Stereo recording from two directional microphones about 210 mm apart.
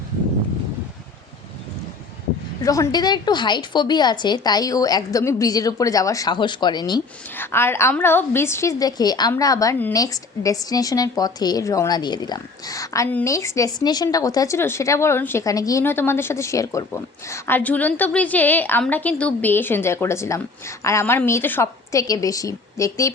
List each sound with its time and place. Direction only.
2.6 s a woman's voice: 15° left (ahead or behind)